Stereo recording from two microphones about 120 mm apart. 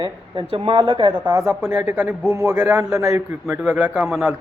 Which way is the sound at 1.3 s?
25° right (ahead or behind).